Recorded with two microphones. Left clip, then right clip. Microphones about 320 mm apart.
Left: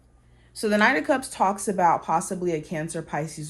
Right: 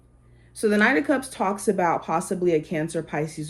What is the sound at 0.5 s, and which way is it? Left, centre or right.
Speech, left.